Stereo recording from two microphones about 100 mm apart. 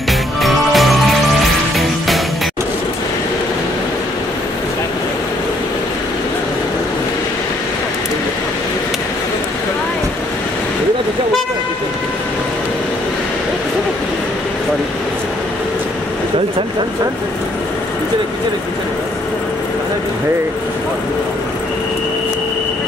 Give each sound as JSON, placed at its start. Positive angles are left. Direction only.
{"t": 0.4, "sound": "music", "side_deg": 0}